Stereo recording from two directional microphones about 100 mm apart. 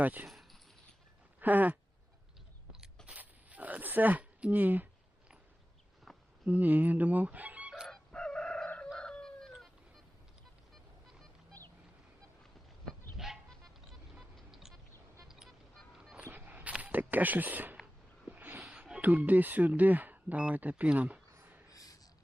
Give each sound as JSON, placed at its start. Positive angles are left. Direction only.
{"t": 0.0, "sound": "speech", "side_deg": -15}
{"t": 0.3, "sound": "a sound", "side_deg": 0}
{"t": 1.4, "sound": "speech", "side_deg": -15}
{"t": 3.1, "sound": "zipper", "side_deg": -15}
{"t": 6.1, "sound": "a sound", "side_deg": 0}
{"t": 6.4, "sound": "speech", "side_deg": -15}
{"t": 7.9, "sound": "chicken", "side_deg": 10}
{"t": 8.9, "sound": "dog", "side_deg": 5}
{"t": 12.8, "sound": "dog", "side_deg": -5}
{"t": 13.5, "sound": "vehicle", "side_deg": 0}
{"t": 15.3, "sound": "music", "side_deg": 0}
{"t": 16.1, "sound": "a sound", "side_deg": -20}
{"t": 21.7, "sound": "snort", "side_deg": 35}